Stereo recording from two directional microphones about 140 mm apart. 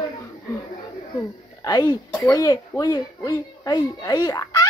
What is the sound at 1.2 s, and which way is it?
Speech, 30° left (ahead or behind).